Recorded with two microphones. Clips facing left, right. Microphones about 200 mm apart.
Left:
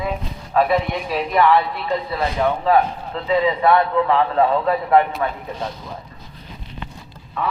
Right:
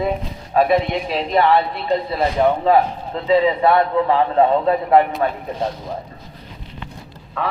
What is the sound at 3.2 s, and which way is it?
A man's voice, 30° right (ahead or behind).